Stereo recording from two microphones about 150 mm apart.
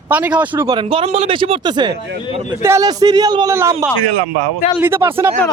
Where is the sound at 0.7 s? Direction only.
35° right (ahead or behind).